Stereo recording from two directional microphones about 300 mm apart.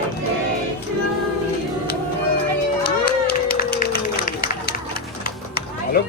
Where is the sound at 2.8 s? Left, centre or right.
Left.